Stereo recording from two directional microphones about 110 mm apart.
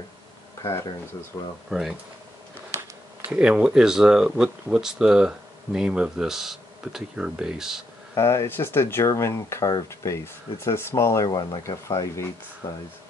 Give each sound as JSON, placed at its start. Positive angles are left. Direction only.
{"t": 1.3, "sound": "speech", "side_deg": 35}
{"t": 1.7, "sound": "speech", "side_deg": -5}
{"t": 3.3, "sound": "speech", "side_deg": -10}
{"t": 8.1, "sound": "speech", "side_deg": 25}
{"t": 11.2, "sound": "speech", "side_deg": 45}
{"t": 11.6, "sound": "speech", "side_deg": 30}